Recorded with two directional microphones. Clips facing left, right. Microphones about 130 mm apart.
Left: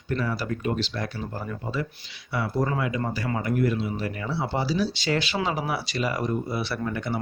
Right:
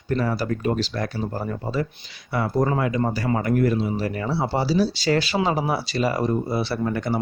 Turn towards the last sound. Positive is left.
turn(degrees=-35)  # may be behind; listen again after turning